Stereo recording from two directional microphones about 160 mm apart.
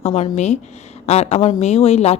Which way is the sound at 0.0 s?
45° left (ahead or behind).